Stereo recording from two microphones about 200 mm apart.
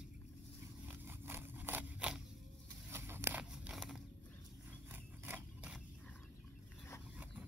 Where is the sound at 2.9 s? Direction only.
10° right (ahead or behind).